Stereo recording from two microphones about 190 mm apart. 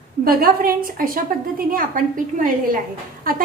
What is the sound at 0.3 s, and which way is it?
A woman's voice, 50° right (ahead or behind).